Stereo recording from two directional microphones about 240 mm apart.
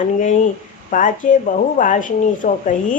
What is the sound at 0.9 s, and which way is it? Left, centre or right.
Speech, left.